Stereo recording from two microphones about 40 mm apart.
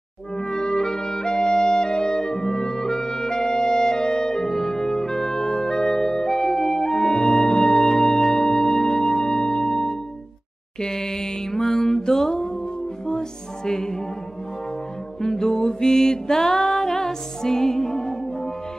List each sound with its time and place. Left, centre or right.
0.4 s music: centre
13.7 s music: centre
15.1 s music: centre